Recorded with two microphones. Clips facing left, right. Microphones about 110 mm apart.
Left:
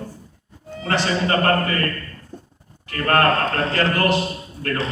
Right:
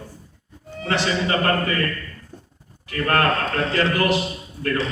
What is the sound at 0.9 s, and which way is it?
A man's voice, 45° left (ahead or behind).